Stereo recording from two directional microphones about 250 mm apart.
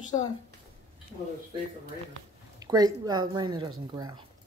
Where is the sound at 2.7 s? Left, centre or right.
Centre.